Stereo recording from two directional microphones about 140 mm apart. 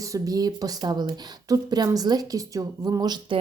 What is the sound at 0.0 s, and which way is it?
Speech, 25° right (ahead or behind).